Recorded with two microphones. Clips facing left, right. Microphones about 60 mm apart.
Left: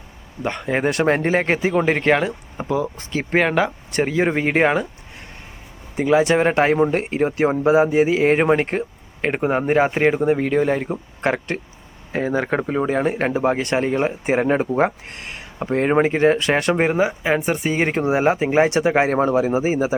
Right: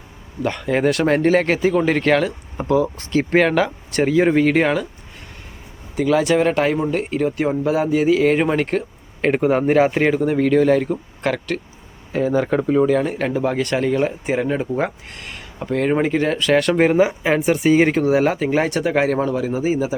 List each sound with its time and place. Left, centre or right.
0.5 s speech: left
4.4 s speech: left
6.0 s speech: left
9.2 s speech: centre
11.2 s speech: left
16.6 s speech: centre
18.1 s speech: centre